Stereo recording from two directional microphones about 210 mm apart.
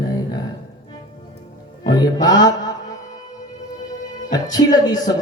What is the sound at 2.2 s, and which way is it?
Mantra, 20° left (ahead or behind).